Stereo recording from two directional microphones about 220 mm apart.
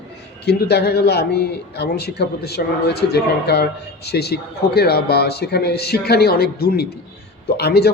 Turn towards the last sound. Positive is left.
turn(degrees=45)  # may be behind; listen again after turning